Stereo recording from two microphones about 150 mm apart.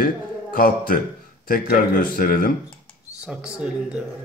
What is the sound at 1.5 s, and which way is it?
Speech, 75° left (ahead or behind).